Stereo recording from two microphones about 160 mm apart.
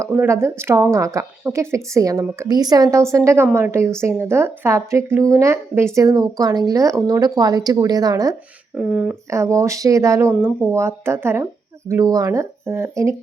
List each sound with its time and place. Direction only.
0.0 s speech: 15° right (ahead or behind)
8.7 s speech: 10° right (ahead or behind)
9.3 s speech: 20° right (ahead or behind)